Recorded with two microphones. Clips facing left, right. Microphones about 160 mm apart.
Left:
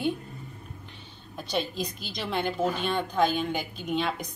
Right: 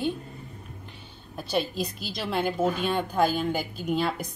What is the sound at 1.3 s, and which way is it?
A woman's voice, 5° right (ahead or behind).